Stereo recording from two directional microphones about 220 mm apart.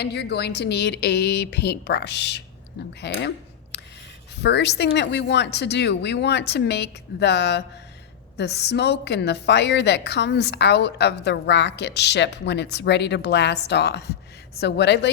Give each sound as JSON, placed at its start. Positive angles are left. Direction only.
{"t": 0.0, "sound": "a woman's voice", "side_deg": 50}
{"t": 3.0, "sound": "a sound", "side_deg": 50}
{"t": 4.4, "sound": "a woman's voice", "side_deg": 50}